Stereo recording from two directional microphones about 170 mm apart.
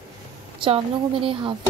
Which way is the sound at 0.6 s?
30° right (ahead or behind).